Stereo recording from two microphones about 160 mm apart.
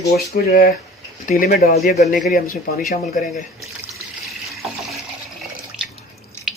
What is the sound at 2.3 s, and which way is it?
Speech, 75° left (ahead or behind).